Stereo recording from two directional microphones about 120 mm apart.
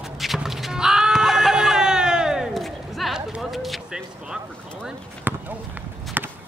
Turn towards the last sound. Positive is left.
turn(degrees=-15)  # may be behind; listen again after turning